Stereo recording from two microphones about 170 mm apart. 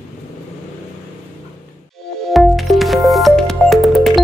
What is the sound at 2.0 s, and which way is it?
Music, centre (ahead or behind).